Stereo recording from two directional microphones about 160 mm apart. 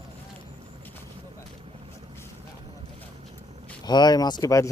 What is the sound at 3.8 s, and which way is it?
Speech, 25° left (ahead or behind).